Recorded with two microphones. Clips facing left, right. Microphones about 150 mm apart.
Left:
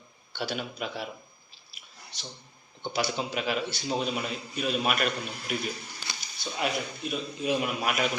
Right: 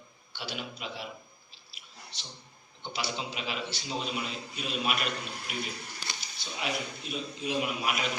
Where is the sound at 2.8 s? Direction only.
50° left (ahead or behind).